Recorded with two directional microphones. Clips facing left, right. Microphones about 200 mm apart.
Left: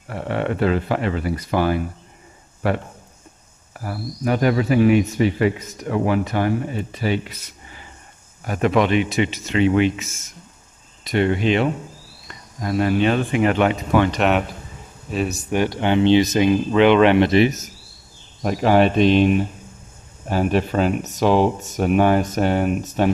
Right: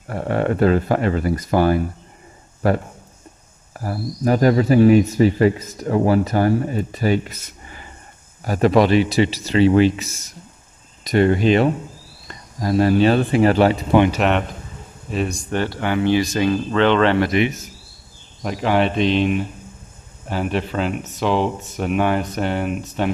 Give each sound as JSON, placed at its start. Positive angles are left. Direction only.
{"t": 0.1, "sound": "speech", "side_deg": -45}
{"t": 8.5, "sound": "speech", "side_deg": -35}
{"t": 14.1, "sound": "speech", "side_deg": 0}
{"t": 17.3, "sound": "speech", "side_deg": 35}